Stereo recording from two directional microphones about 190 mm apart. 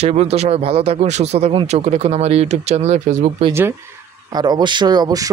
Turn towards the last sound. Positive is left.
turn(degrees=-20)  # may be behind; listen again after turning